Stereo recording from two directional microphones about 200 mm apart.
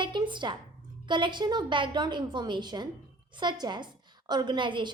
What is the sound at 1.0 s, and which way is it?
A woman's voice, 25° right (ahead or behind).